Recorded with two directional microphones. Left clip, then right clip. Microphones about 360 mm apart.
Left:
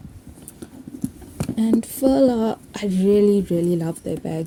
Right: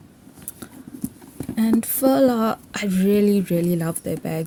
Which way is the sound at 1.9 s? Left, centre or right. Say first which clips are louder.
Even; right.